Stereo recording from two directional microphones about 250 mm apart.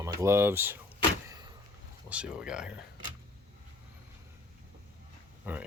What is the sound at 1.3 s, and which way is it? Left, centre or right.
Vehicle, centre.